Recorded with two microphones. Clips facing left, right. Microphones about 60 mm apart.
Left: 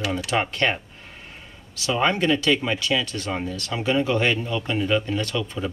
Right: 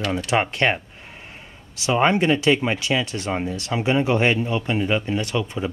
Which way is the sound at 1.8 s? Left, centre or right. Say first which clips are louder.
Right 3 dB; right.